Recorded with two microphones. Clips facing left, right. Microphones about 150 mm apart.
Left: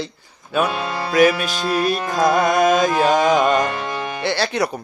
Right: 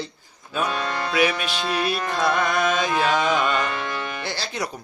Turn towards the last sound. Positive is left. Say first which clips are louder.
# left 9 dB
turn(degrees=65)  # may be behind; listen again after turning